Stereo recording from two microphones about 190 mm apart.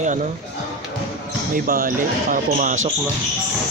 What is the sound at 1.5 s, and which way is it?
Speech, 45° right (ahead or behind).